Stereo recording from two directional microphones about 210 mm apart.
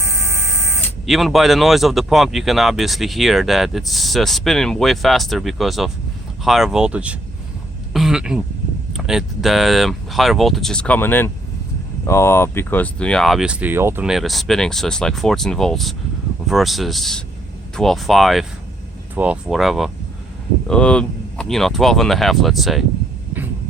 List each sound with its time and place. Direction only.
1.0 s speech: centre (ahead or behind)
7.9 s a sound: centre (ahead or behind)
8.9 s speech: centre (ahead or behind)